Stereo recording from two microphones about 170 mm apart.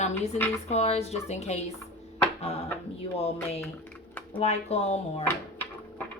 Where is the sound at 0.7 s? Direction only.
40° left (ahead or behind).